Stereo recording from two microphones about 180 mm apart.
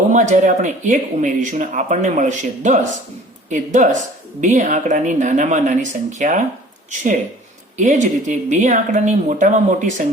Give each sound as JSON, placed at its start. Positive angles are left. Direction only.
{"t": 0.1, "sound": "speech", "side_deg": -45}